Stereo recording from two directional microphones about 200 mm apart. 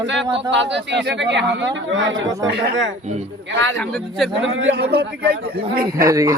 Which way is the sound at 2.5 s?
55° right (ahead or behind).